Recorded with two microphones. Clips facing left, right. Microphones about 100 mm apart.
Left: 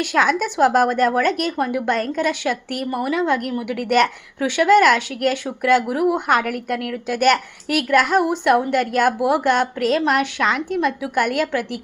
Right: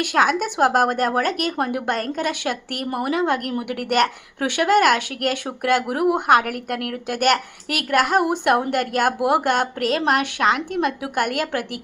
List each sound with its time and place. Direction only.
0.0 s a woman's voice: 50° right (ahead or behind)